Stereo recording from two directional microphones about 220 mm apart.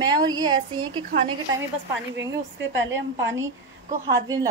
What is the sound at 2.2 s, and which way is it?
A woman's voice, 55° right (ahead or behind).